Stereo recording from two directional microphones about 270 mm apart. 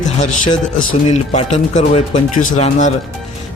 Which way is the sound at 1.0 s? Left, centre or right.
Left.